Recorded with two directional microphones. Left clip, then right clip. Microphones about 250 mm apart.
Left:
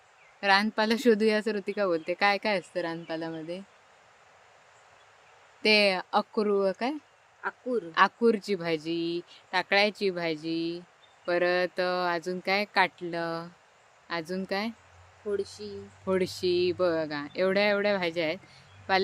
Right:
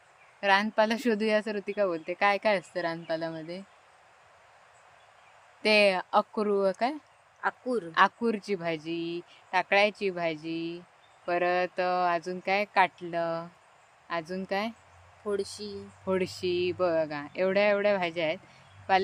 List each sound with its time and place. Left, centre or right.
0.3 s speech: centre
5.6 s speech: centre
7.4 s speech: right
7.9 s speech: centre
15.3 s speech: right
16.0 s speech: centre